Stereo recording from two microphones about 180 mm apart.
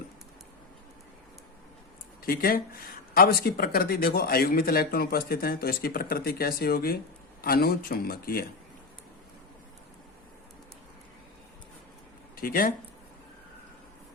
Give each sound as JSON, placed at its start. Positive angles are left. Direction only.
{"t": 2.2, "sound": "speech", "side_deg": 55}
{"t": 12.4, "sound": "speech", "side_deg": 55}